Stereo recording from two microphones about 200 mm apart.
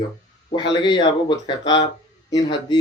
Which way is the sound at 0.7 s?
25° left (ahead or behind).